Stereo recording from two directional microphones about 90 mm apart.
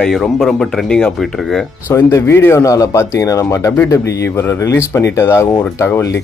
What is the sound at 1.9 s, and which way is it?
Speech, 30° left (ahead or behind).